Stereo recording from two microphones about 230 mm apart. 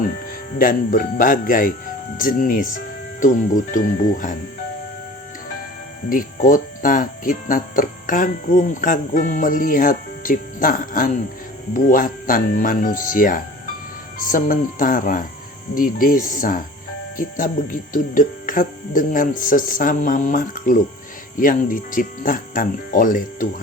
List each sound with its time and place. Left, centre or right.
0.6 s speech: left
6.5 s speech: left